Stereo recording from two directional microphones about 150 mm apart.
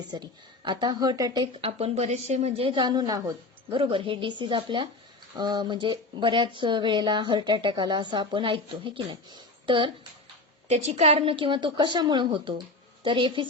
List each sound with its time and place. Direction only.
0.1 s a woman's voice: 30° right (ahead or behind)
1.6 s speech: 45° right (ahead or behind)
10.7 s speech: 45° right (ahead or behind)